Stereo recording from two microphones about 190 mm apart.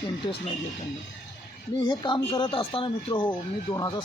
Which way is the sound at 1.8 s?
25° left (ahead or behind).